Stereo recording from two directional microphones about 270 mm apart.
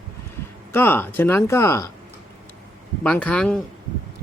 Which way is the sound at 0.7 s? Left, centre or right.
Centre.